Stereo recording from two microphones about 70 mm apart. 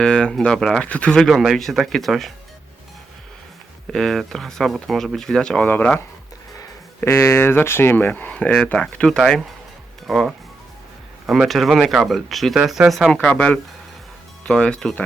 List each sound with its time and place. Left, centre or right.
0.0 s speech: centre
1.3 s speech: centre
3.9 s speech: centre
5.6 s speech: left
7.0 s speech: left; by 9.1 s centre
9.1 s speech: centre
13.2 s speech: centre